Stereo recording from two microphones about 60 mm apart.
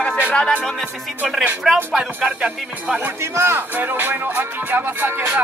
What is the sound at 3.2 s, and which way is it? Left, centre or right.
Speech, right.